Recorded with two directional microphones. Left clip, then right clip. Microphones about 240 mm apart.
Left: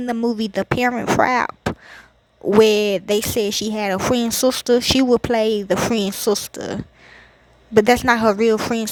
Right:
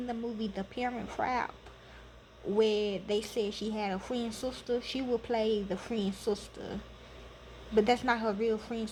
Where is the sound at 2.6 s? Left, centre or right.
Left.